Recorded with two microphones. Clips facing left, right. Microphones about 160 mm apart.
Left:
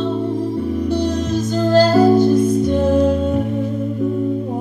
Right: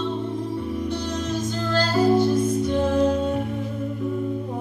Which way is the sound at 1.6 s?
40° left (ahead or behind).